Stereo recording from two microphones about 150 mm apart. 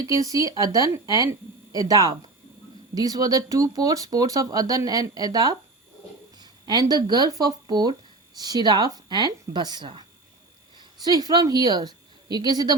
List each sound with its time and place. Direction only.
0.3 s speech: 25° right (ahead or behind)
11.0 s speech: 25° right (ahead or behind)